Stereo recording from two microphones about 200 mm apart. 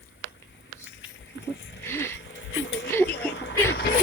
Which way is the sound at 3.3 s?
60° left (ahead or behind).